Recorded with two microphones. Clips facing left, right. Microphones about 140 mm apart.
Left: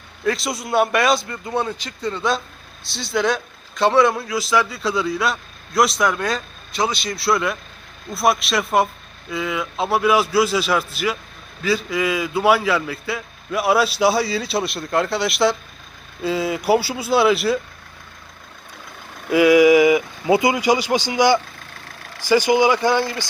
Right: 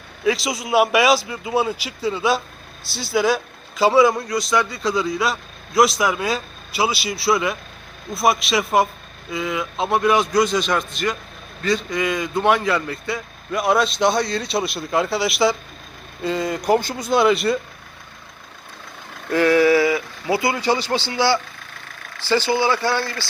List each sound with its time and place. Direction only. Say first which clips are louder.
0.3 s a man's voice: right 2 dB; centre (ahead or behind)
19.3 s speech: left 3 dB; 10° left (ahead or behind)